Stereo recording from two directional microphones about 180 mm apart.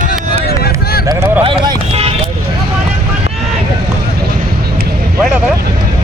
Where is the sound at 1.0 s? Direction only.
20° right (ahead or behind).